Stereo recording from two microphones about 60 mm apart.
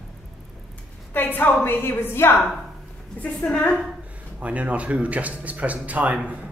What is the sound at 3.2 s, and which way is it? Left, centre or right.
Speech, centre.